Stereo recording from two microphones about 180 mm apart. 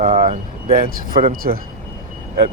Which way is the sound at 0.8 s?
50° right (ahead or behind).